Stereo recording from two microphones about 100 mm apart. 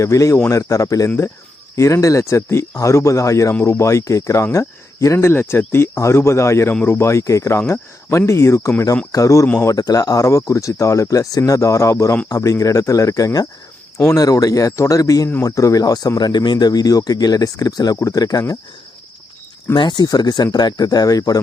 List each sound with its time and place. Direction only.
0.0 s speech: 30° left (ahead or behind)
19.7 s speech: 50° left (ahead or behind)